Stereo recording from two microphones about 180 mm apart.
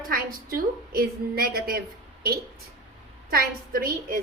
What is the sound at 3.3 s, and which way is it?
Speech, 55° right (ahead or behind).